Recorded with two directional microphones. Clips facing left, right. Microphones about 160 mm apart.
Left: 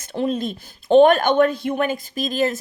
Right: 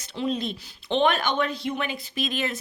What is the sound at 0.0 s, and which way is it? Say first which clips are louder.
A child's voice: left 5 dB; 50° left (ahead or behind).